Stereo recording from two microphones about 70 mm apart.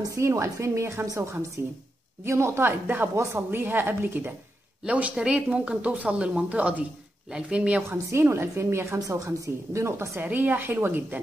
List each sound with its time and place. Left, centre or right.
0.1 s a woman's voice: right
1.6 s a woman's voice: right
4.8 s a woman's voice: centre
7.9 s a woman's voice: right
10.2 s a woman's voice: right